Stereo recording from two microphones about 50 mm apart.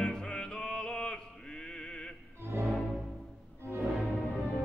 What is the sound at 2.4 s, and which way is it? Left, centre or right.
Music, right.